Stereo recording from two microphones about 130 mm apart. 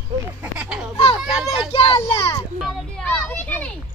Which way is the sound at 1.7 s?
45° left (ahead or behind).